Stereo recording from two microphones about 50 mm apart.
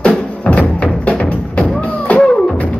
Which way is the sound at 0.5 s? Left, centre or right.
Left.